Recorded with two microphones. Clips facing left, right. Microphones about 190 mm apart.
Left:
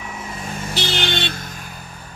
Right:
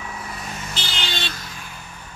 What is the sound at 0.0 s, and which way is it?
Vehicle, 20° left (ahead or behind).